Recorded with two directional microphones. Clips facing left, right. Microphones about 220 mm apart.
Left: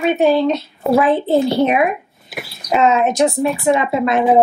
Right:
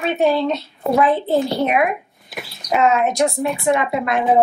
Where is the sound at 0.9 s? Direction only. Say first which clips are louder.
Left 3 dB; centre (ahead or behind).